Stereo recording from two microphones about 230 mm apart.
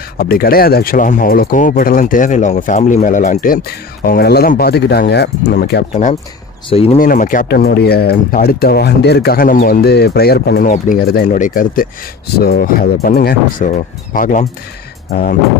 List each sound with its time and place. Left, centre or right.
0.2 s speech: left
5.9 s speech: left